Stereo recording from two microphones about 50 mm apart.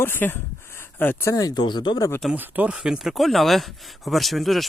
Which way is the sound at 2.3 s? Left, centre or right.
Right.